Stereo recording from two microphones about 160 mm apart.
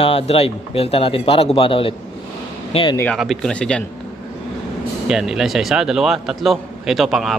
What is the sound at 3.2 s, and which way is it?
Speech, centre (ahead or behind).